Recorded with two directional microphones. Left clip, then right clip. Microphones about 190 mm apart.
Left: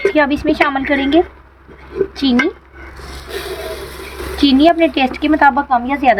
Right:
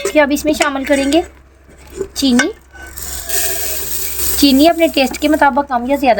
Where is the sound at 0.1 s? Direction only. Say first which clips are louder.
Right 2 dB; 50° right (ahead or behind).